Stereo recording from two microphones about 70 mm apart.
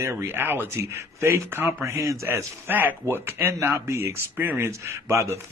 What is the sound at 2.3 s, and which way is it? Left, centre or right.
Speech, right.